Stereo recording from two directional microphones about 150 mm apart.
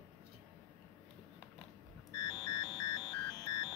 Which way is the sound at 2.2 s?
30° left (ahead or behind).